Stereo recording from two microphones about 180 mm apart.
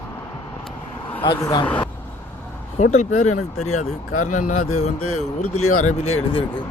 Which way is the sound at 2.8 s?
40° left (ahead or behind).